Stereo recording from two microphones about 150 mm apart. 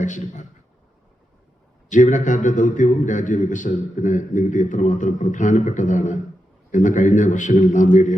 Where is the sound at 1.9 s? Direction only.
55° left (ahead or behind).